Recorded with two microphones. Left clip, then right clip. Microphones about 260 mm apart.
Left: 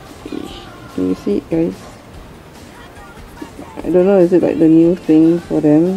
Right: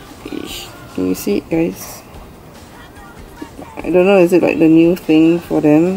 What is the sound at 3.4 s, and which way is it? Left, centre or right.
Speech, centre.